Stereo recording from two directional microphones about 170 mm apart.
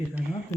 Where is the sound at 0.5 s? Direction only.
15° left (ahead or behind).